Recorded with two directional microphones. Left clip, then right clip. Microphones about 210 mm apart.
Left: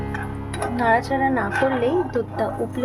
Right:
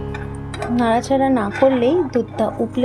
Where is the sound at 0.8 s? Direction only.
35° right (ahead or behind).